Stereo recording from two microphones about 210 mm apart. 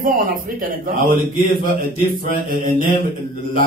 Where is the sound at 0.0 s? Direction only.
45° right (ahead or behind).